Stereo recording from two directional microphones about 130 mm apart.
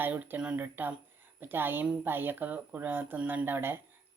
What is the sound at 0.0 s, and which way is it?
Speech, 15° right (ahead or behind).